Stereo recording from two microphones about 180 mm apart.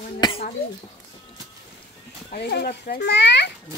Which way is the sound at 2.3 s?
65° left (ahead or behind).